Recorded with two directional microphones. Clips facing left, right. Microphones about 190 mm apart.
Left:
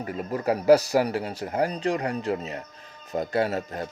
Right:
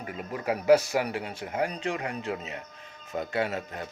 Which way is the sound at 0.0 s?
40° left (ahead or behind).